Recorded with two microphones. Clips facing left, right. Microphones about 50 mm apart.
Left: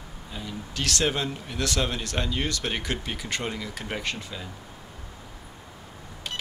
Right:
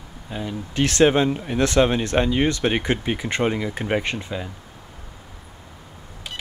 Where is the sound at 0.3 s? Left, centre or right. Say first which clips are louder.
Right 7 dB; right.